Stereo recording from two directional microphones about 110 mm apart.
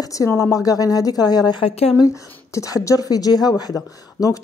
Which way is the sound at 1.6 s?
65° left (ahead or behind).